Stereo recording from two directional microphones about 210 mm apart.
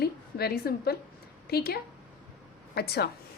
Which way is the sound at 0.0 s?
50° left (ahead or behind).